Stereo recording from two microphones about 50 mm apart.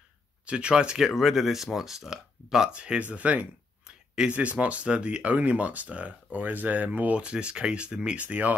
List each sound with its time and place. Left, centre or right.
0.5 s speech: right
1.0 s speech: centre
2.7 s speech: right
3.8 s a sound: centre
4.3 s speech: right